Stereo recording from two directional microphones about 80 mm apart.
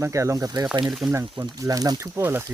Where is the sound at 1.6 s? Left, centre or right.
Right.